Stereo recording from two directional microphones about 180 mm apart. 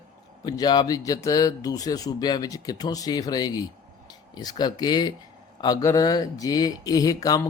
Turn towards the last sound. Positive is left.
turn(degrees=20)  # may be behind; listen again after turning